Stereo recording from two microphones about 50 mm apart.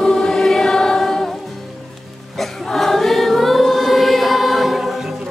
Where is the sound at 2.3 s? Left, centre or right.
Centre.